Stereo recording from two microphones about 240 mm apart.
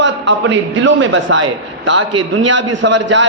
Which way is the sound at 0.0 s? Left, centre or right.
Right.